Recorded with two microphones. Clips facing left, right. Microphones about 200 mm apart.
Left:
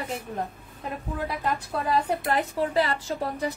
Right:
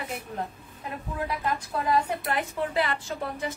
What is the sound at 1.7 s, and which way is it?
A woman's voice, 35° left (ahead or behind).